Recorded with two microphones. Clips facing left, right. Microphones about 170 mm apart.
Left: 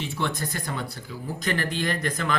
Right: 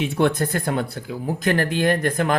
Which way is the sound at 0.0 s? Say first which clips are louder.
Right 9 dB; 60° right (ahead or behind).